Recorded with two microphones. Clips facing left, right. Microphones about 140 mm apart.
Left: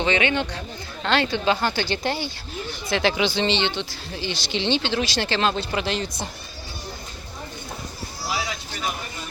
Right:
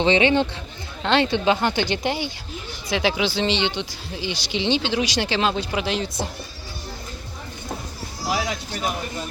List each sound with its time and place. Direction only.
0.0 s speech: 30° right (ahead or behind); by 6.1 s 5° right (ahead or behind)